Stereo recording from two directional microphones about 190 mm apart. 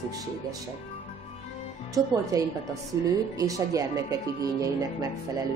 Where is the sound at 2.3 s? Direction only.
20° right (ahead or behind).